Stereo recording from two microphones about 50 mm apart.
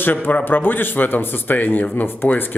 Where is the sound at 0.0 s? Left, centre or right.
Left.